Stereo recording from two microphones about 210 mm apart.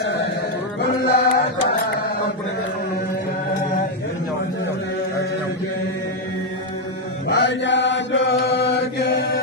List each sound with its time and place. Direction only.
0.8 s music: 45° left (ahead or behind)
7.3 s chant: 60° left (ahead or behind)